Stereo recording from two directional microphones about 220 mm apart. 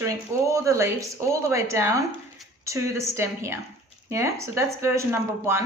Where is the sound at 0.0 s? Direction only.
15° right (ahead or behind).